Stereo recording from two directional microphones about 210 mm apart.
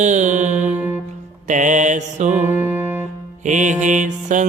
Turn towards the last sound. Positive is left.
turn(degrees=-35)  # may be behind; listen again after turning